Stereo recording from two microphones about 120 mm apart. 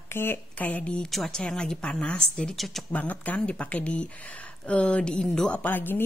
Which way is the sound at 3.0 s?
10° left (ahead or behind).